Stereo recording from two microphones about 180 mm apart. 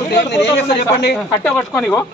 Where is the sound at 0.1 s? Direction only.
65° left (ahead or behind).